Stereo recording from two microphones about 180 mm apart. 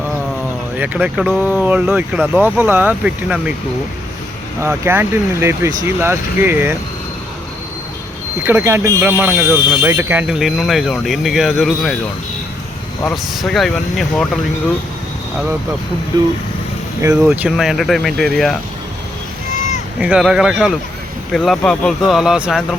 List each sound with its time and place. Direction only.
0.8 s speech: 5° right (ahead or behind)
4.6 s speech: 15° right (ahead or behind)
8.4 s speech: 15° right (ahead or behind)
13.3 s speech: centre (ahead or behind)
16.1 s speech: 25° right (ahead or behind)
17.0 s speech: 10° right (ahead or behind)
20.0 s speech: 5° right (ahead or behind)